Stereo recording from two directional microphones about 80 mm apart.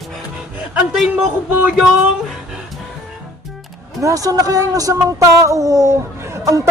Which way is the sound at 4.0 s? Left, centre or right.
Right.